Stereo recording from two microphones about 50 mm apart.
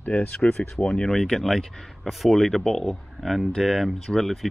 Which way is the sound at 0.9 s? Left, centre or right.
Centre.